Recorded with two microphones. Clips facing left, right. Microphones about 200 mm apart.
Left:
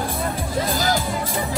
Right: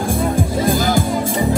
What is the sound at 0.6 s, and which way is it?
Music, 50° right (ahead or behind).